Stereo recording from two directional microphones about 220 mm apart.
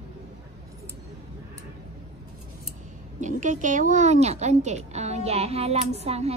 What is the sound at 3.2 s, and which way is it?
A woman's voice, 35° right (ahead or behind).